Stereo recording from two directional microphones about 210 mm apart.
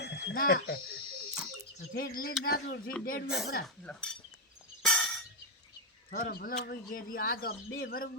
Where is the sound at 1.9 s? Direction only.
45° left (ahead or behind).